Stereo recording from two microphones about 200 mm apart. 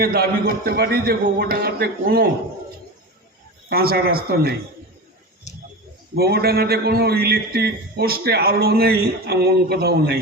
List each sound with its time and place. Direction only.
0.0 s a man's voice: 50° right (ahead or behind)
3.7 s a man's voice: 50° right (ahead or behind)
5.5 s bird: 35° left (ahead or behind)
6.1 s a man's voice: 50° right (ahead or behind)